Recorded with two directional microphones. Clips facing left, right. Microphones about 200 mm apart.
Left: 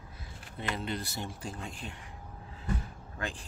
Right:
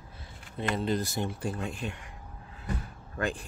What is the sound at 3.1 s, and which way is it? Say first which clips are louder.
Speech: right 7 dB; 60° right (ahead or behind).